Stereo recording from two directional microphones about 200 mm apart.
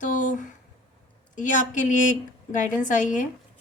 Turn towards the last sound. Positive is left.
turn(degrees=40)  # may be behind; listen again after turning